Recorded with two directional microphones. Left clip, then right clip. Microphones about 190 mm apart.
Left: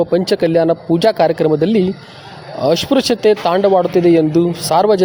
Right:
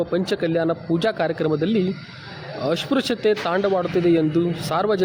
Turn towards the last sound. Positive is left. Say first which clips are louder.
# left 9 dB
turn(degrees=25)  # may be behind; listen again after turning